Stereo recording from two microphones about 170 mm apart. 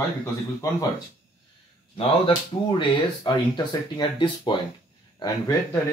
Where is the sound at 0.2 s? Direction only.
20° left (ahead or behind).